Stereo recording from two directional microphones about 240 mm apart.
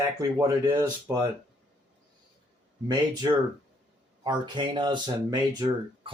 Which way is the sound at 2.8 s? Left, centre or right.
Centre.